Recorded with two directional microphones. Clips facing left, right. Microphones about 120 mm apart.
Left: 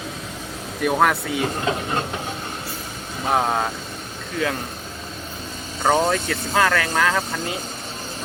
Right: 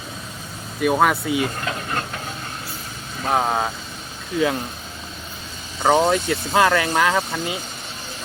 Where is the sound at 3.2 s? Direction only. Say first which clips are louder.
Even; centre (ahead or behind).